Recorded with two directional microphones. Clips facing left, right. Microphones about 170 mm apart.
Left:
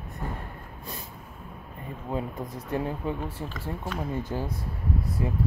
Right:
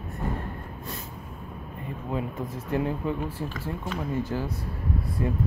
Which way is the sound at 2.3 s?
15° left (ahead or behind).